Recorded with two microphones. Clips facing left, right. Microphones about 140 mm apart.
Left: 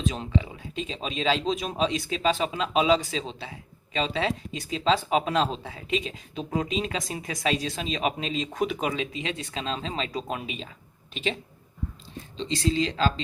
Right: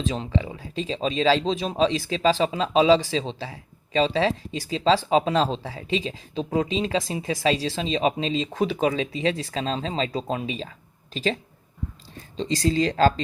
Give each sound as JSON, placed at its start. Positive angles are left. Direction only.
{"t": 0.0, "sound": "speech", "side_deg": -30}
{"t": 12.4, "sound": "speech", "side_deg": -40}